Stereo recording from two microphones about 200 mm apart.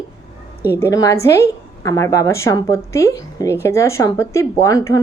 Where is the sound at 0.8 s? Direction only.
15° left (ahead or behind).